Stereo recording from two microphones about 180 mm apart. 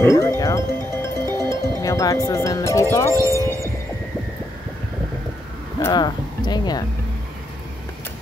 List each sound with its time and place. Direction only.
0.0 s music: 15° left (ahead or behind)
5.9 s speech: 25° left (ahead or behind)